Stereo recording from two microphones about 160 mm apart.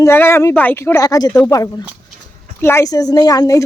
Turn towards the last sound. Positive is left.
turn(degrees=20)  # may be behind; listen again after turning